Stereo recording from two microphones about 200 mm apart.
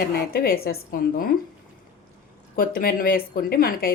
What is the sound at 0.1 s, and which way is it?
Speech, 50° left (ahead or behind).